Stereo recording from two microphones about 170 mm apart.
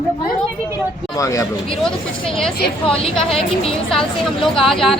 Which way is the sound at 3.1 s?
5° left (ahead or behind).